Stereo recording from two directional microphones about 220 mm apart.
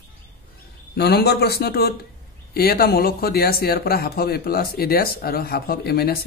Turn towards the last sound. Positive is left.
turn(degrees=45)  # may be behind; listen again after turning